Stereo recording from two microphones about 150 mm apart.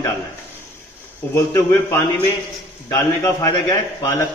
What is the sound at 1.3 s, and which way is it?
Speech, 15° left (ahead or behind).